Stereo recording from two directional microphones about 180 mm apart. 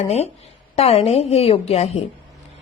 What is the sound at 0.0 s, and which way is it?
A woman's voice, 35° left (ahead or behind).